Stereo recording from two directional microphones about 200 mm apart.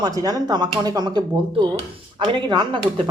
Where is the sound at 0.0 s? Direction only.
20° right (ahead or behind).